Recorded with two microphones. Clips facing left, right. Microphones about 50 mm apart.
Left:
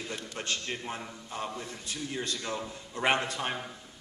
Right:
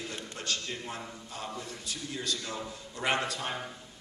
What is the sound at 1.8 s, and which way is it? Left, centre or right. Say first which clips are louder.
A man's voice: left 1 dB; left.